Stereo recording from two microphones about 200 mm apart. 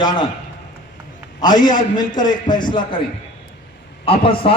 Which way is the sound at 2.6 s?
25° left (ahead or behind).